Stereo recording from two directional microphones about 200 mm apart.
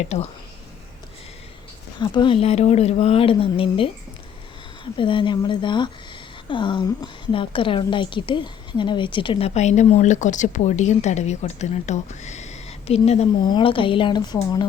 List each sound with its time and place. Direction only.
2.0 s a woman's voice: 25° left (ahead or behind)
4.9 s a woman's voice: 25° left (ahead or behind)